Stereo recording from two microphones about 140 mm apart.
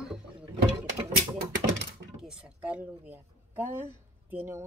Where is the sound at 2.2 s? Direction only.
5° right (ahead or behind).